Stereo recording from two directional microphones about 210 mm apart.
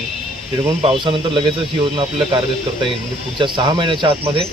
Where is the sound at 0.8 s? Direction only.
25° right (ahead or behind).